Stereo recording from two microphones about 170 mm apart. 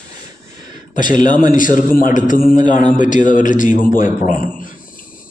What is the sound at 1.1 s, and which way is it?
A man's voice, 50° left (ahead or behind).